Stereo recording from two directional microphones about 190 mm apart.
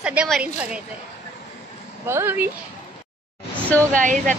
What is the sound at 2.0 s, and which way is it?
Speech, 10° right (ahead or behind).